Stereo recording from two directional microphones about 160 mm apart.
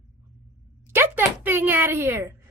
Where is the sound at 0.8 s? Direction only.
15° right (ahead or behind).